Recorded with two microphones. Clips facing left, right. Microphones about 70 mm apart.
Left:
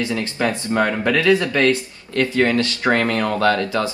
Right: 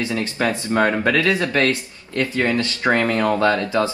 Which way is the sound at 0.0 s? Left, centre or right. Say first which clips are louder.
Even; right.